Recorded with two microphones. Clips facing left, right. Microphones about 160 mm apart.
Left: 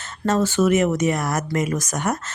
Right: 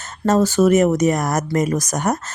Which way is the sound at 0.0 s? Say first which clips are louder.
Right 4 dB; 40° right (ahead or behind).